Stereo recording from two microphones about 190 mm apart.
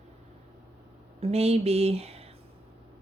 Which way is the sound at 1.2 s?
35° right (ahead or behind).